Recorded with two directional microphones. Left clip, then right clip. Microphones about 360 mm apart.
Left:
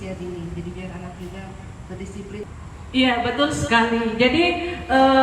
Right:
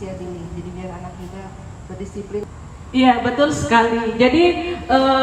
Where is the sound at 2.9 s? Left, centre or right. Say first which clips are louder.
Right 4 dB; right.